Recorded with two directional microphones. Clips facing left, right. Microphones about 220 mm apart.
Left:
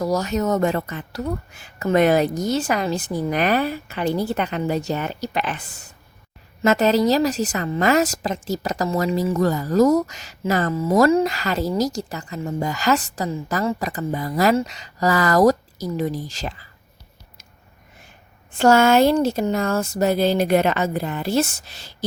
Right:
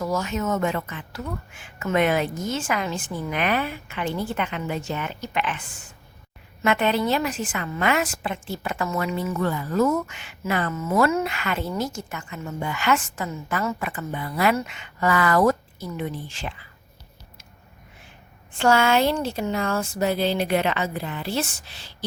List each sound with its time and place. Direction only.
0.0 s a woman's voice: 40° left (ahead or behind)
18.5 s speech: 40° left (ahead or behind)